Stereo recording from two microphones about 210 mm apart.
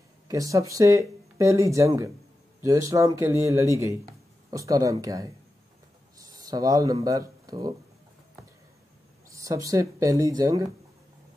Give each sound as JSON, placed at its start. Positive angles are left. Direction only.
{"t": 0.3, "sound": "speech", "side_deg": -15}
{"t": 6.1, "sound": "a sound", "side_deg": -15}
{"t": 7.1, "sound": "speech", "side_deg": -15}
{"t": 9.3, "sound": "speech", "side_deg": -15}